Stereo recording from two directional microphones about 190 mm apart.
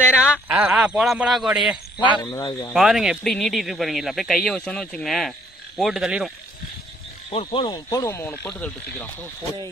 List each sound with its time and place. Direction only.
0.3 s speech: 10° right (ahead or behind)
2.0 s speech: 20° left (ahead or behind)
2.7 s speech: centre (ahead or behind)
7.2 s speech: 25° left (ahead or behind); by 9.0 s 10° left (ahead or behind)